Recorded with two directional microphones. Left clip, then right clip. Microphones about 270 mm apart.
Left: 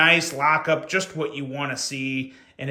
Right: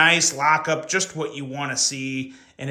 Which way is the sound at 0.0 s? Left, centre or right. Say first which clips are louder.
Right 1 dB; centre.